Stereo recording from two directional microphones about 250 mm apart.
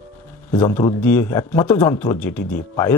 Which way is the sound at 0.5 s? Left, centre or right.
Centre.